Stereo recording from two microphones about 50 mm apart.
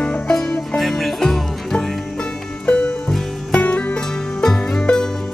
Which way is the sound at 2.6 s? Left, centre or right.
Left.